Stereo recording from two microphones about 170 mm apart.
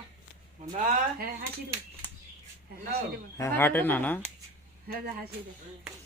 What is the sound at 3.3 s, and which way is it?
Speech, 15° left (ahead or behind).